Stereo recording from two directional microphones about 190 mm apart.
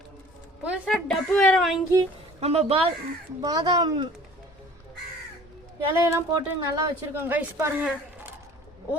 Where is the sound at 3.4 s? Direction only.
20° right (ahead or behind).